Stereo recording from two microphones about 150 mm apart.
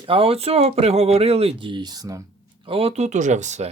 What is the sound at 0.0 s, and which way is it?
Speech, 35° right (ahead or behind).